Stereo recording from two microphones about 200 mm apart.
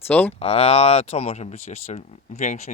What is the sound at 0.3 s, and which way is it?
Speech, 30° left (ahead or behind).